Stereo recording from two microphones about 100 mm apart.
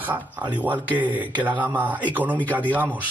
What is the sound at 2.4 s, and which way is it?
Speech, 15° left (ahead or behind).